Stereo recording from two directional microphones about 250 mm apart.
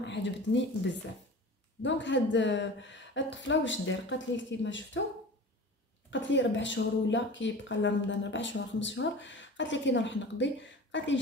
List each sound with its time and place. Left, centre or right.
0.0 s speech: left
6.0 s speech: left